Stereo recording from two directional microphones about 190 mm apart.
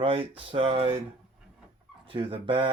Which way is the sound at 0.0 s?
30° right (ahead or behind).